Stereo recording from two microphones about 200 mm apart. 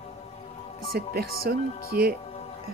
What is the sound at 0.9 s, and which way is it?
A woman's voice, 50° right (ahead or behind).